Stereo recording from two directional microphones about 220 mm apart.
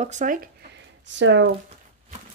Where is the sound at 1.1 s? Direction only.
55° right (ahead or behind).